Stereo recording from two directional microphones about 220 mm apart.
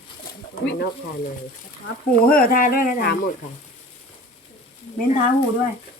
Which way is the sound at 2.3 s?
40° left (ahead or behind).